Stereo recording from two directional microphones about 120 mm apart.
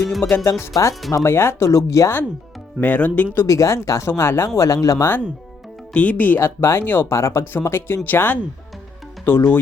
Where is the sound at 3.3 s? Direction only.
25° left (ahead or behind).